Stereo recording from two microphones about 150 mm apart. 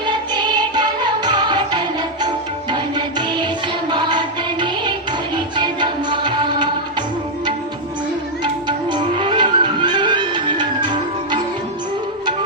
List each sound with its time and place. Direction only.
0.0 s music: 30° right (ahead or behind)
3.2 s music: 30° right (ahead or behind)
4.6 s music: 30° right (ahead or behind)
8.6 s music: 30° right (ahead or behind)